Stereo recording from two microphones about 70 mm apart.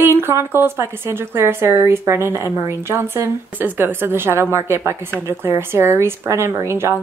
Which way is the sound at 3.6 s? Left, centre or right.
Right.